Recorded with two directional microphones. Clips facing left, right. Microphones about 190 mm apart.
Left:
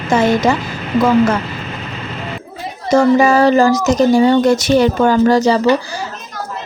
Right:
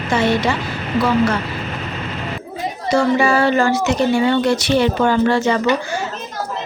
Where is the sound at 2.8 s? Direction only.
40° left (ahead or behind).